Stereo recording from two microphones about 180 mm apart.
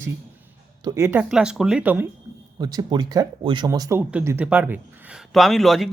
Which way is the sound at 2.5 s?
25° right (ahead or behind).